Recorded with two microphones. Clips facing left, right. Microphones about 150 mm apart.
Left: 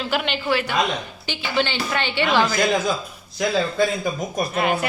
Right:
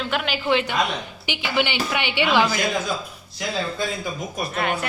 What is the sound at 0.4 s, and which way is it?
A woman's voice, 20° right (ahead or behind).